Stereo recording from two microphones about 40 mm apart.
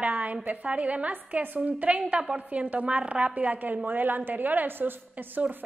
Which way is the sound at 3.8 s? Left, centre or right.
Right.